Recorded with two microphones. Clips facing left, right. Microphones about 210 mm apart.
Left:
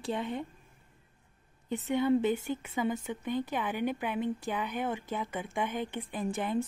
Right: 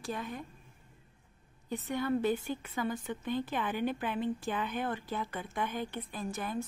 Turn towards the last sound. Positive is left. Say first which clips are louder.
# left 5 dB
turn(degrees=20)  # may be behind; listen again after turning